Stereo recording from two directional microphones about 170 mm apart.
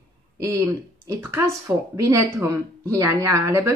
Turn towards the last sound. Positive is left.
turn(degrees=-15)  # may be behind; listen again after turning